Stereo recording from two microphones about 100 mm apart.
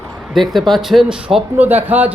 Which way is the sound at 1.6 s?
20° right (ahead or behind).